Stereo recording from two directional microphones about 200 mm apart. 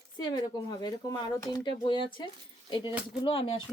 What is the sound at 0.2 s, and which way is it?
Speech, 20° left (ahead or behind).